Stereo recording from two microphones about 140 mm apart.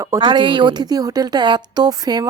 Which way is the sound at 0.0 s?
25° right (ahead or behind).